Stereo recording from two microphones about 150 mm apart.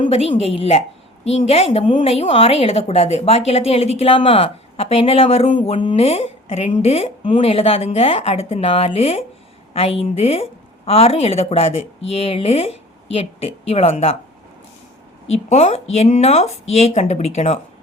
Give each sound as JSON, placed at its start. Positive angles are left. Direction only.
{"t": 0.0, "sound": "a woman's voice", "side_deg": 40}
{"t": 15.3, "sound": "a woman's voice", "side_deg": 45}